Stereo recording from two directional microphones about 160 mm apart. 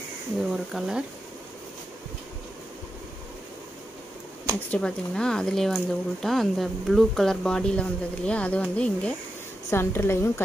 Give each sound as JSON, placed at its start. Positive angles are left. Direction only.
{"t": 0.5, "sound": "speech", "side_deg": -5}
{"t": 4.6, "sound": "a woman's voice", "side_deg": 5}